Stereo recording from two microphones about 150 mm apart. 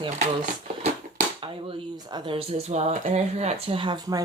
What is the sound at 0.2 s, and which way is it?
Speech, 50° right (ahead or behind).